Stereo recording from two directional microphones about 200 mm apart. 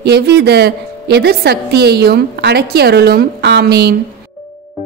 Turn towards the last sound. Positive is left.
turn(degrees=-55)  # may be behind; listen again after turning